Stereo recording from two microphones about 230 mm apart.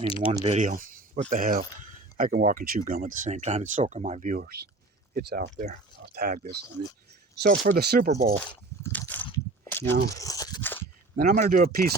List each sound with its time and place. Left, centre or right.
0.0 s speech: left
0.4 s speech: right
8.8 s a sound: centre
9.9 s speech: right
10.2 s a sound: centre
11.2 s speech: right